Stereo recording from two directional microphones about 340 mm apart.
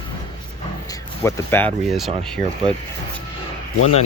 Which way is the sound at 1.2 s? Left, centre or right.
Centre.